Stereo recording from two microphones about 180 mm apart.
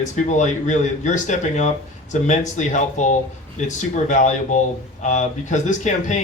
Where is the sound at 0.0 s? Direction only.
40° left (ahead or behind).